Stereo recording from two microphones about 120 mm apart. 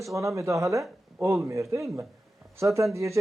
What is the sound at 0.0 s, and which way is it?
Speech, 25° right (ahead or behind).